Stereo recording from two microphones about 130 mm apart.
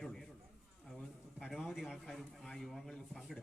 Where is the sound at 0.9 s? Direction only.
5° left (ahead or behind).